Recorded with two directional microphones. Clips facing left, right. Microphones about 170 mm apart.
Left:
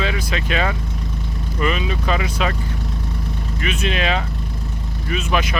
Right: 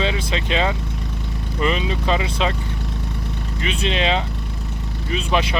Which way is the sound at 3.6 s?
25° right (ahead or behind).